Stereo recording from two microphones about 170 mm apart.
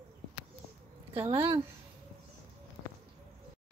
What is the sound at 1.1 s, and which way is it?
Speech, 35° right (ahead or behind).